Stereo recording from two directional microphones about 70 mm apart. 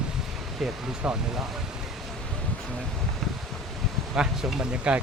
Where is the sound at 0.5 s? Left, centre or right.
Centre.